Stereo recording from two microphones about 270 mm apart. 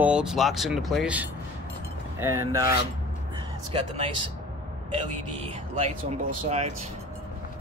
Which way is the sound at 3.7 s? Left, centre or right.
Centre.